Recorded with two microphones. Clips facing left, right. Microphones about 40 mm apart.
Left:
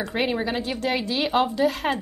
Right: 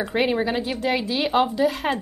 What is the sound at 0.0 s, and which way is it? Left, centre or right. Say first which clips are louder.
A woman's voice: right 3 dB; centre.